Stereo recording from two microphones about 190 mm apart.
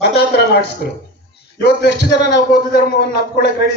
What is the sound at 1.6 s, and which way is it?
A man's voice, 60° left (ahead or behind).